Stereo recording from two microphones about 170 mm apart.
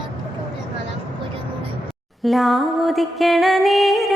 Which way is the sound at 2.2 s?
Centre (ahead or behind).